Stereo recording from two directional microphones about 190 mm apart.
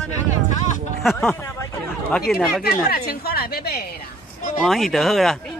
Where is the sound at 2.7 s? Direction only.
50° left (ahead or behind).